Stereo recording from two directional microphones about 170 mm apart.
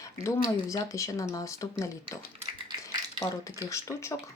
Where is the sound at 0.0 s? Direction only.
20° left (ahead or behind).